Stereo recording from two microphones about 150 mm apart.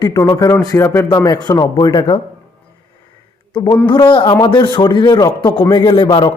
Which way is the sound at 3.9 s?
30° left (ahead or behind).